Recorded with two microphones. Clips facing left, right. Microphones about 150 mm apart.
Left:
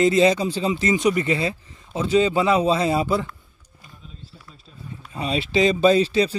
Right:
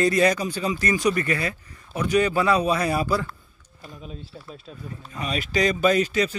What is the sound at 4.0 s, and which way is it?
Speech, 70° right (ahead or behind).